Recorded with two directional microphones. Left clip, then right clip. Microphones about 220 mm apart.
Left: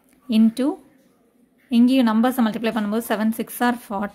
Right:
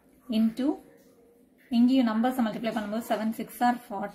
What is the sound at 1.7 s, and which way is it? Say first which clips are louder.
A woman's voice: left 7 dB; 45° left (ahead or behind).